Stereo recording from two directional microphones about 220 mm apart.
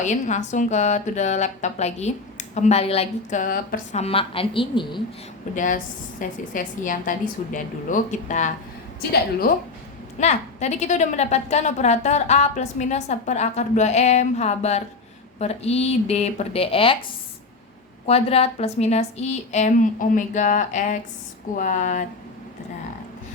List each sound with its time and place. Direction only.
0.0 s a woman's voice: 30° left (ahead or behind)
4.0 s speech: 25° left (ahead or behind)
5.5 s a woman's voice: 35° left (ahead or behind)
10.2 s a woman's voice: 30° left (ahead or behind)
18.0 s a woman's voice: 25° left (ahead or behind)